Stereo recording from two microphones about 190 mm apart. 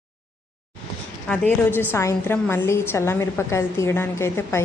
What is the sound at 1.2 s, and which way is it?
A woman's voice, 5° left (ahead or behind).